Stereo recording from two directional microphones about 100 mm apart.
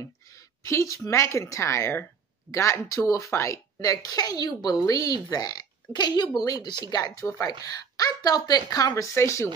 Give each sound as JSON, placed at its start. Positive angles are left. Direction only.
{"t": 0.7, "sound": "a woman's voice", "side_deg": 30}